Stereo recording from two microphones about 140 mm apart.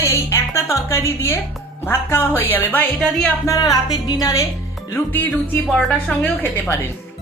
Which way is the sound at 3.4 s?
25° left (ahead or behind).